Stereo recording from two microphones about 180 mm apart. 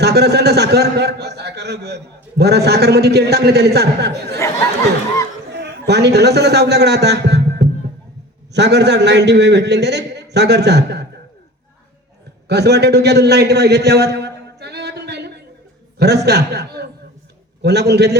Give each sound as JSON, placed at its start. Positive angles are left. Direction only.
{"t": 0.0, "sound": "a sound", "side_deg": -65}
{"t": 2.4, "sound": "a man's voice", "side_deg": -65}
{"t": 5.5, "sound": "a man's voice", "side_deg": -65}
{"t": 12.5, "sound": "a man's voice", "side_deg": -65}